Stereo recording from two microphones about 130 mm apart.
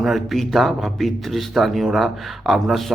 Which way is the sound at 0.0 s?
Centre (ahead or behind).